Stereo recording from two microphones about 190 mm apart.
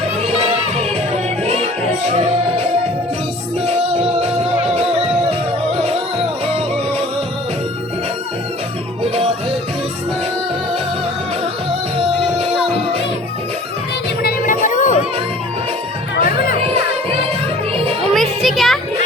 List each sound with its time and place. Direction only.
0.2 s music: 30° right (ahead or behind)
3.7 s music: 30° right (ahead or behind)
14.2 s music: 50° left (ahead or behind)
16.1 s music: 50° left (ahead or behind)
18.1 s music: centre (ahead or behind)